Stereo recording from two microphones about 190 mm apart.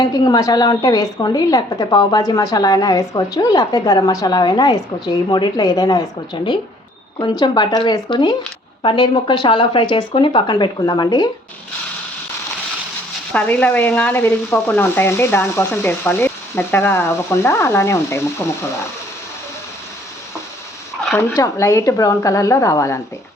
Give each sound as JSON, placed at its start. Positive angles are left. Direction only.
{"t": 0.0, "sound": "a woman's voice", "side_deg": 20}
{"t": 13.3, "sound": "stir", "side_deg": 5}
{"t": 21.2, "sound": "stir", "side_deg": 15}